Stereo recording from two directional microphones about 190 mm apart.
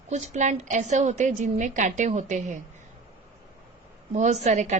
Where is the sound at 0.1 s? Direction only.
40° right (ahead or behind).